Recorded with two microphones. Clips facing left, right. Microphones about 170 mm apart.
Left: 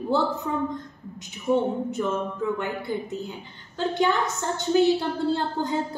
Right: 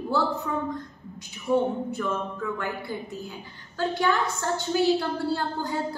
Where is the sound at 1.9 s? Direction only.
20° left (ahead or behind).